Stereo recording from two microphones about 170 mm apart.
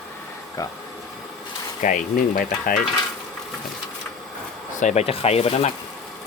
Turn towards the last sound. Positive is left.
turn(degrees=35)  # may be behind; listen again after turning